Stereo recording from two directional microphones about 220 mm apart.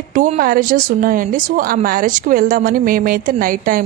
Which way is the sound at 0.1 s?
40° right (ahead or behind).